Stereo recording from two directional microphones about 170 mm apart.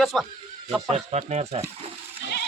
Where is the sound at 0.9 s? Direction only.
40° right (ahead or behind).